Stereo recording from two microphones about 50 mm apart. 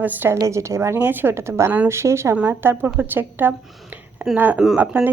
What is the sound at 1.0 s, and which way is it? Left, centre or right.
Speech, right.